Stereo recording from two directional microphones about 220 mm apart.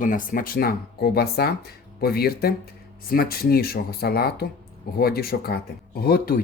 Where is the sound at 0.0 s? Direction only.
40° left (ahead or behind).